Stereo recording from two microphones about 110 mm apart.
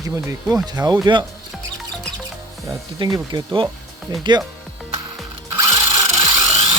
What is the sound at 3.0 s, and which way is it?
Speech, 40° right (ahead or behind).